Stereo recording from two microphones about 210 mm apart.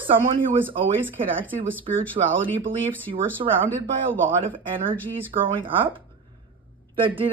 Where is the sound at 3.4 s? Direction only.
25° right (ahead or behind).